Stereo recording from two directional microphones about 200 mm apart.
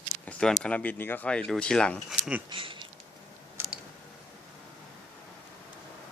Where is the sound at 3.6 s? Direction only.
10° right (ahead or behind).